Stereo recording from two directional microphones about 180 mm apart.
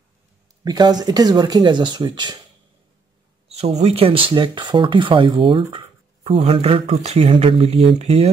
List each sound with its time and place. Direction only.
0.7 s speech: 25° right (ahead or behind)
3.4 s speech: 35° right (ahead or behind)